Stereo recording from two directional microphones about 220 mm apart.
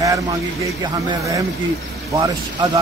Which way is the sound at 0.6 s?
15° right (ahead or behind).